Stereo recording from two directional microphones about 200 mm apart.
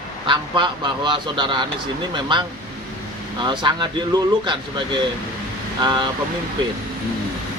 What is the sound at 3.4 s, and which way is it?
Speech, 20° right (ahead or behind).